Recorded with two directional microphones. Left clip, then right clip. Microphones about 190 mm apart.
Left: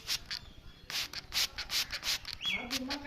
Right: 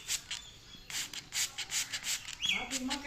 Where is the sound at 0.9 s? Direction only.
55° left (ahead or behind).